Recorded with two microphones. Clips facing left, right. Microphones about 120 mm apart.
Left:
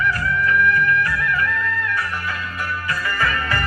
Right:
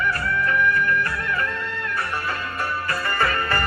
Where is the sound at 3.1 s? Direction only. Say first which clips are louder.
Right 1 dB; 35° right (ahead or behind).